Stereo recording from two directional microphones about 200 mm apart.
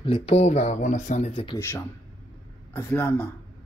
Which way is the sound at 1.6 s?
10° left (ahead or behind).